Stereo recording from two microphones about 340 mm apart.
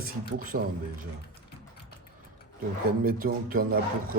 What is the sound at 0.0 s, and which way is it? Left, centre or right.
Speech, right.